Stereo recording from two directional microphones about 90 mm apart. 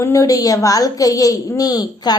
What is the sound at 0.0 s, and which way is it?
A woman's voice, 35° left (ahead or behind).